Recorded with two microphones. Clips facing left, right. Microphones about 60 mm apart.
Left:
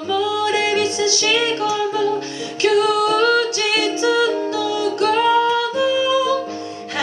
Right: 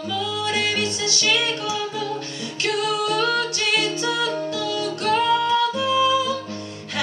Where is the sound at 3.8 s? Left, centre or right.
Centre.